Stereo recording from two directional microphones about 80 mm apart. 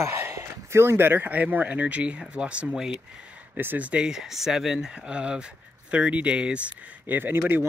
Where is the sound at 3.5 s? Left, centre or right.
Right.